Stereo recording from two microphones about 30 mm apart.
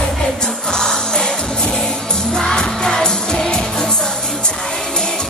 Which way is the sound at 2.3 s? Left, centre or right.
Left.